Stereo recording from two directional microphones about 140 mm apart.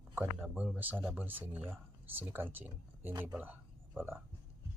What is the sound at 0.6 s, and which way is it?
Speech, 10° right (ahead or behind).